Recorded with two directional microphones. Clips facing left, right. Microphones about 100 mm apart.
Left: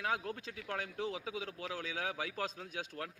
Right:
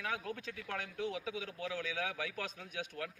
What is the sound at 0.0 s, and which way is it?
A man's voice, 35° left (ahead or behind).